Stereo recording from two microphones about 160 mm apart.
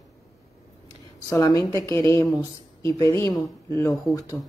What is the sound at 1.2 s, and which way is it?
Speech, 20° left (ahead or behind).